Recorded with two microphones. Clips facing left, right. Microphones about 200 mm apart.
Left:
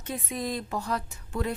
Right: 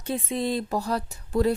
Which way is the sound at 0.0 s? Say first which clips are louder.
Right 5 dB; 30° right (ahead or behind).